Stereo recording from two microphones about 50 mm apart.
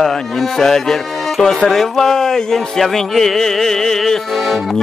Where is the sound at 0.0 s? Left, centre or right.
Centre.